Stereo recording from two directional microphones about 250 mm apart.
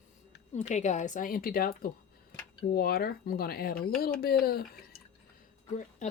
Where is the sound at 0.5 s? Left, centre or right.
Left.